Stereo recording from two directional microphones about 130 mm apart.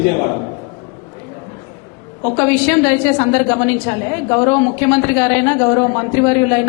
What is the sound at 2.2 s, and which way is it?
A woman's voice, 15° left (ahead or behind).